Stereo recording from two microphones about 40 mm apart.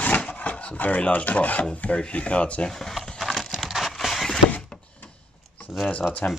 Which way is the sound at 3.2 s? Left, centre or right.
Centre.